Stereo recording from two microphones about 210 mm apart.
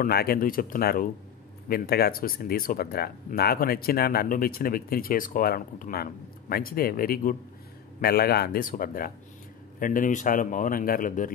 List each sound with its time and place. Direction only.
0.0 s a man's voice: 45° left (ahead or behind)